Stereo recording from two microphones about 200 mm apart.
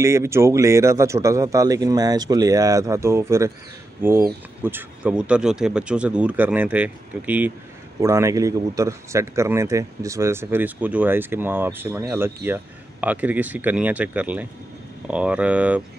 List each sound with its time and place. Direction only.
0.0 s speech: 15° right (ahead or behind)
4.6 s speech: 10° right (ahead or behind)